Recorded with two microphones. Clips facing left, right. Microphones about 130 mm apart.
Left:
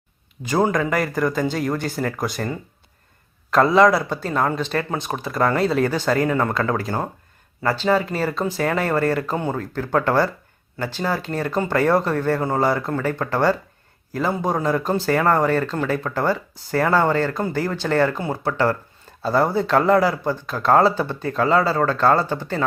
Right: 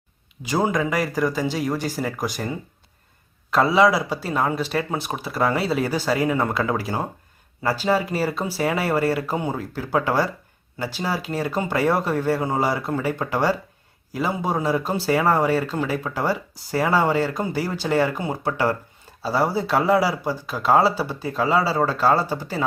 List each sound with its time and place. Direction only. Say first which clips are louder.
0.4 s speech: left 2 dB; 5° right (ahead or behind)